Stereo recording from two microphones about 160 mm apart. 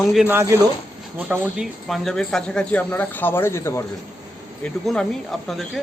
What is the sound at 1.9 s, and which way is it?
Speech, 5° left (ahead or behind).